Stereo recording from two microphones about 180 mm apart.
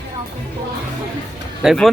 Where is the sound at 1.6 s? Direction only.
Centre (ahead or behind).